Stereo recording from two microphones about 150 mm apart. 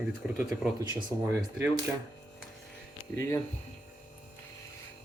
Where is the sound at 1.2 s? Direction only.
15° right (ahead or behind).